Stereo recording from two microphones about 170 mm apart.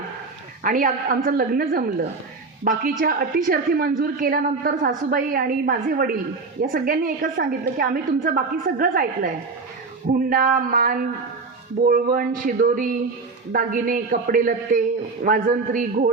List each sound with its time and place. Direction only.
0.6 s a woman's voice: 50° right (ahead or behind)
7.3 s a woman's voice: 90° right
7.9 s a woman's voice: 55° right (ahead or behind)